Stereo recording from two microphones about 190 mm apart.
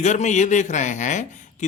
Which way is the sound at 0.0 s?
40° left (ahead or behind).